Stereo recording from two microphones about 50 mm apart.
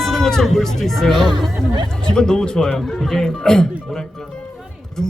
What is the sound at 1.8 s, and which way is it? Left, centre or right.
Speech, centre.